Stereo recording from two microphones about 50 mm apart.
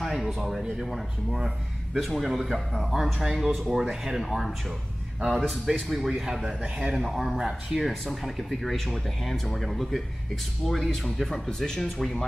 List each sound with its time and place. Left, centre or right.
0.0 s speech: centre
6.6 s speech: right
7.1 s speech: centre
7.8 s speech: centre